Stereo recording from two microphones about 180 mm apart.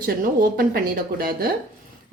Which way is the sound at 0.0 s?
55° right (ahead or behind).